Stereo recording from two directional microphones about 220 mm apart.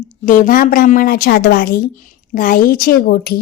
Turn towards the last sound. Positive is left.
turn(degrees=45)  # may be behind; listen again after turning